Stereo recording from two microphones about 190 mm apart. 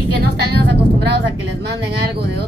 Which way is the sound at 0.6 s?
65° right (ahead or behind).